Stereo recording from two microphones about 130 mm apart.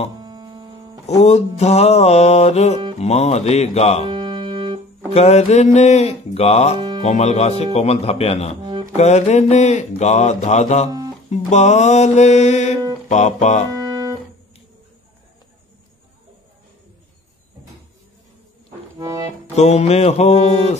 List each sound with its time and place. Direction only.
0.2 s mains hum: 35° right (ahead or behind)
1.0 s mantra: 60° left (ahead or behind)
4.1 s music: 35° right (ahead or behind)
5.1 s mantra: 60° left (ahead or behind)
8.9 s mantra: 60° left (ahead or behind)
13.7 s music: 25° right (ahead or behind)
18.9 s accordion: 25° right (ahead or behind)
19.5 s mantra: 60° left (ahead or behind)